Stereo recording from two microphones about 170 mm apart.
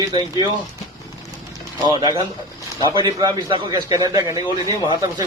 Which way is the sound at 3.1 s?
25° right (ahead or behind).